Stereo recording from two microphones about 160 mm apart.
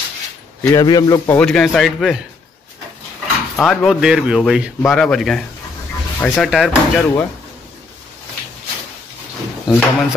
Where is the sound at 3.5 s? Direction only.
5° left (ahead or behind).